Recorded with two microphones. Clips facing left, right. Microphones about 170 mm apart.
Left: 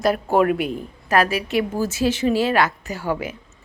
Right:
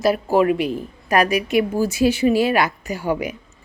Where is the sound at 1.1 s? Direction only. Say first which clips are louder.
Right 2 dB; 15° right (ahead or behind).